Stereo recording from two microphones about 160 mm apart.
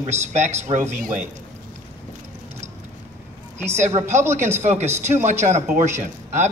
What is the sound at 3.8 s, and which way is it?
Speech, 45° right (ahead or behind).